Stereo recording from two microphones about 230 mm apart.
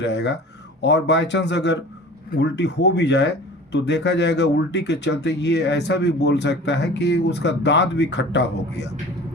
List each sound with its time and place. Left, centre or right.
0.0 s a man's voice: left